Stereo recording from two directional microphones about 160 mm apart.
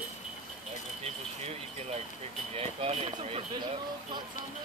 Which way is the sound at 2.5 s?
40° right (ahead or behind).